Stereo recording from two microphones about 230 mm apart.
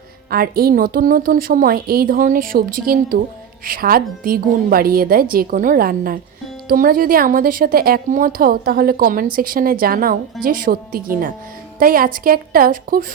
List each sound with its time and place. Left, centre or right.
0.3 s speech: right